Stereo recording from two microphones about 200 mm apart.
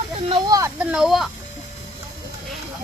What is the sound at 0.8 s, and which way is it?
Speech, 5° right (ahead or behind).